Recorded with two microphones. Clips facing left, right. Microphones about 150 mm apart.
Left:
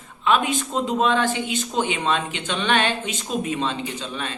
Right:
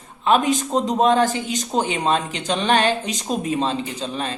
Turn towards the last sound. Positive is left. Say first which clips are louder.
# right 3 dB
turn(degrees=-35)  # may be behind; listen again after turning